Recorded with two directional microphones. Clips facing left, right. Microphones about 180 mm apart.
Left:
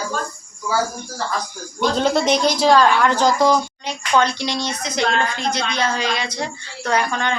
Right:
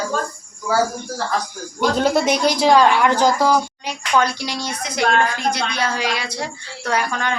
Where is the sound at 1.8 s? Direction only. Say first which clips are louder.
Right 1 dB; 10° right (ahead or behind).